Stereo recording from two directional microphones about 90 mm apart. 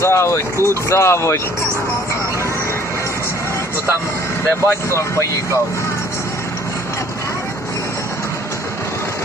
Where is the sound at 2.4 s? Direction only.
30° left (ahead or behind).